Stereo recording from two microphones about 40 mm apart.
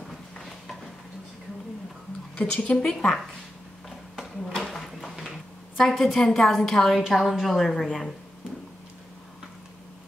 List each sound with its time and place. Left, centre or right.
2.3 s a woman's voice: left
2.8 s a woman's voice: centre
4.6 s a sound: centre
5.8 s a woman's voice: centre
7.0 s a woman's voice: centre